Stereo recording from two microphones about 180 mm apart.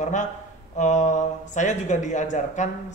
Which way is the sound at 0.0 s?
40° left (ahead or behind).